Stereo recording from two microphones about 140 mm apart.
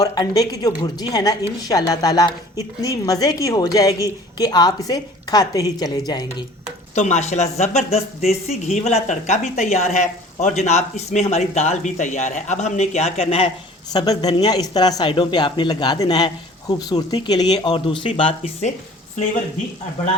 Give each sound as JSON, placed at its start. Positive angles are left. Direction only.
{"t": 0.0, "sound": "a woman's voice", "side_deg": 30}
{"t": 6.9, "sound": "speech", "side_deg": 55}
{"t": 13.9, "sound": "a woman's voice", "side_deg": 30}